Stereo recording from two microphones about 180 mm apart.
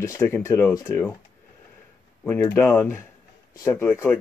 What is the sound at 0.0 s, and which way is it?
Speech, 15° left (ahead or behind).